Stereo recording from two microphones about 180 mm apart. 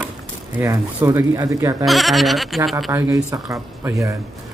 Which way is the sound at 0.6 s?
15° right (ahead or behind).